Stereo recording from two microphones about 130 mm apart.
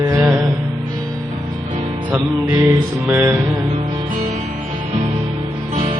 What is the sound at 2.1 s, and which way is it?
Music, 30° right (ahead or behind).